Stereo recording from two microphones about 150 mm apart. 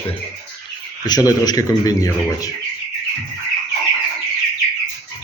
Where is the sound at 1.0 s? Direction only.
25° left (ahead or behind).